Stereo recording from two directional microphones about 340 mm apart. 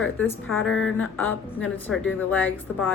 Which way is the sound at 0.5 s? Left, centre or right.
Left.